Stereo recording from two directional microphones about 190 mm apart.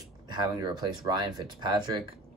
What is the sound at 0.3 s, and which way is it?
Speech, 20° right (ahead or behind).